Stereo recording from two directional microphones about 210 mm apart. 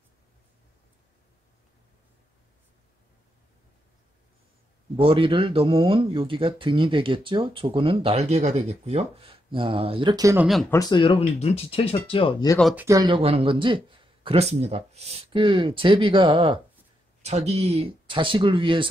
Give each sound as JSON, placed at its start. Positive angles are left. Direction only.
{"t": 4.9, "sound": "speech", "side_deg": -25}
{"t": 10.7, "sound": "speech", "side_deg": 20}
{"t": 12.7, "sound": "speech", "side_deg": -15}